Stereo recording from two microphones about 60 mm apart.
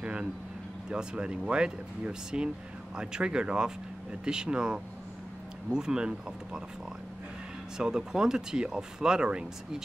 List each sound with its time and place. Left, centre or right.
0.0 s a sound: centre
0.8 s speech: centre
7.7 s speech: centre